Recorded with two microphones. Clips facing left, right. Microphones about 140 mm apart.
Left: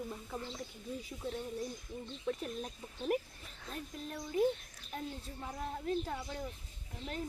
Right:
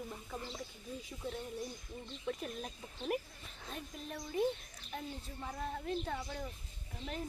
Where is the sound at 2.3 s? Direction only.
Centre (ahead or behind).